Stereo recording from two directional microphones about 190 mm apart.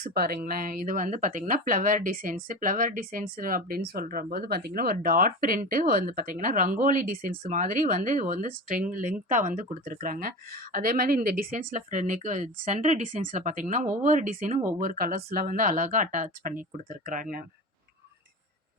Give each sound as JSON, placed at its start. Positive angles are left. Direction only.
{"t": 0.0, "sound": "speech", "side_deg": -55}